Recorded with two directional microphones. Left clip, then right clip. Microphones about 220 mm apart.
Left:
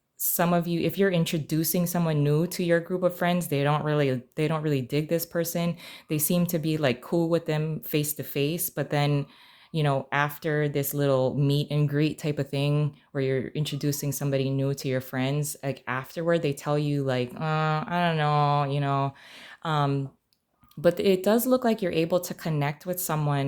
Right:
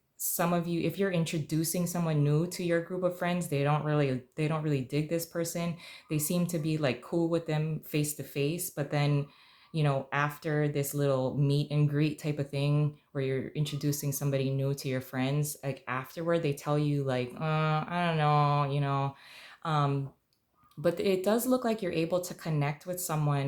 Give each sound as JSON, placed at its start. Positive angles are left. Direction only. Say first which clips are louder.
{"t": 0.2, "sound": "speech", "louder": "left 5 dB", "side_deg": 40}